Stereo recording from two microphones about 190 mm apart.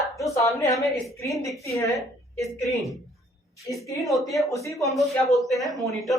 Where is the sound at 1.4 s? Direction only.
15° left (ahead or behind).